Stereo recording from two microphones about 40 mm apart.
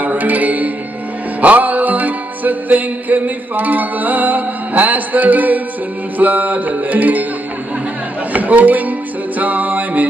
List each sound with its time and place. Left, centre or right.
0.0 s mantra: right
1.4 s music: right
8.3 s music: right